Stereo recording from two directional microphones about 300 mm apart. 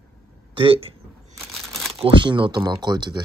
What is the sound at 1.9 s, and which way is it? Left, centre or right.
Speech, centre.